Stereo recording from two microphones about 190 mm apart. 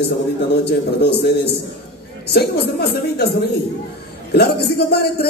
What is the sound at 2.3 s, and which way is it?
A man's voice, 60° left (ahead or behind).